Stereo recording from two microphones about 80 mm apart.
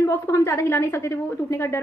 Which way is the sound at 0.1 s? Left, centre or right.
Left.